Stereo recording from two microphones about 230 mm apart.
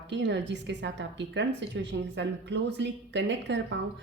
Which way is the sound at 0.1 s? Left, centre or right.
Right.